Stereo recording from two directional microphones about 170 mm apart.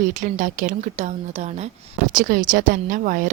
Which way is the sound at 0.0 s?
45° right (ahead or behind).